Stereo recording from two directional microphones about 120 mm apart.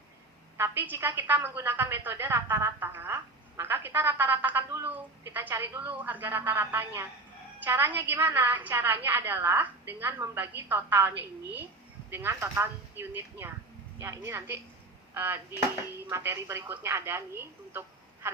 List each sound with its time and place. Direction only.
0.5 s a woman's voice: 15° right (ahead or behind)